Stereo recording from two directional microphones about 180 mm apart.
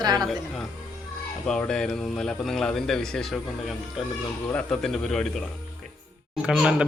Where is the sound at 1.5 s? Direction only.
5° left (ahead or behind).